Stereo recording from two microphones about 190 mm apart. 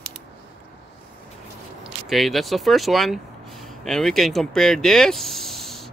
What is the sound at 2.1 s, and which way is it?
Speech, centre (ahead or behind).